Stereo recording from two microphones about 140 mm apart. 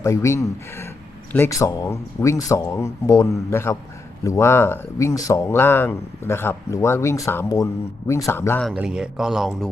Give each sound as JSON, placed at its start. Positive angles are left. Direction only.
{"t": 0.0, "sound": "speech", "side_deg": 20}
{"t": 8.7, "sound": "speech", "side_deg": -5}